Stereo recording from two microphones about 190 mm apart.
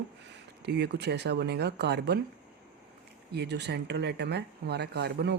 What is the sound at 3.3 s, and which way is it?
Speech, 60° right (ahead or behind).